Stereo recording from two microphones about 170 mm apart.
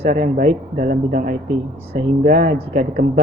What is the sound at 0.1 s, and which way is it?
Speech, 50° right (ahead or behind).